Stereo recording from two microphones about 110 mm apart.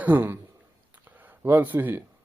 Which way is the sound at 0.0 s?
20° right (ahead or behind).